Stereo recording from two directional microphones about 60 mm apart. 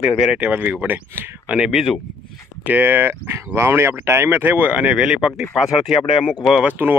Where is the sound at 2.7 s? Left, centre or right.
Right.